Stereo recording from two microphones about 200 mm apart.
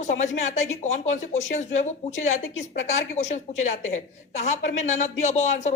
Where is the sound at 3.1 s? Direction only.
35° left (ahead or behind).